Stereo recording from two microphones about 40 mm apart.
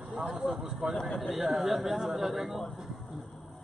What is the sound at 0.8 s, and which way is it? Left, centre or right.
Speech, centre.